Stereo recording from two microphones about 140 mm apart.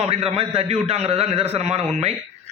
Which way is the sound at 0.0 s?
45° right (ahead or behind).